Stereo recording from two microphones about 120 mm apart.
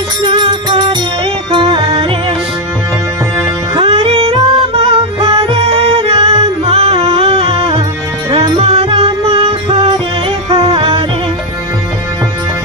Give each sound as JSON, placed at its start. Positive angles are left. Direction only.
{"t": 0.2, "sound": "music", "side_deg": -45}
{"t": 3.7, "sound": "music", "side_deg": -55}